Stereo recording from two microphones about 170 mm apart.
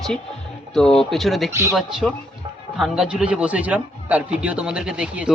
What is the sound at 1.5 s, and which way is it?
Speech, 15° right (ahead or behind).